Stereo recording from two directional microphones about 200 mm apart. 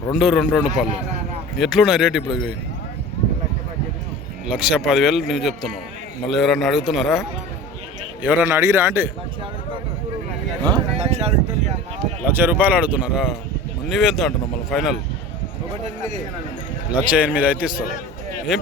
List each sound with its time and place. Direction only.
0.1 s speech: centre (ahead or behind)
4.4 s speech: 5° right (ahead or behind)
10.9 s a sound: 30° right (ahead or behind)
12.3 s speech: 10° right (ahead or behind)
16.9 s speech: 5° right (ahead or behind)